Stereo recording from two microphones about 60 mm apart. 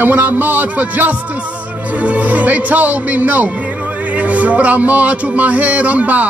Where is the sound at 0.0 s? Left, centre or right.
Right.